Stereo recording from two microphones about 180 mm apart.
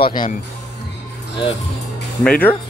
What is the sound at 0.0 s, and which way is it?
Speech, 25° left (ahead or behind).